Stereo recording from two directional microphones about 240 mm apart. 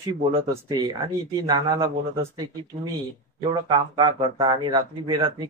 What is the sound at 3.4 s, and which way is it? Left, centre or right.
Speech, centre.